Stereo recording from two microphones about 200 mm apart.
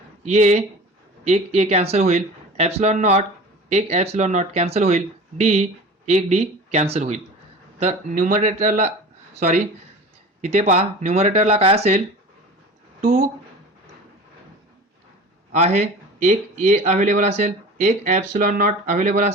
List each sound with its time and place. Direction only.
0.3 s a man's voice: 35° right (ahead or behind)
15.5 s a man's voice: 35° right (ahead or behind)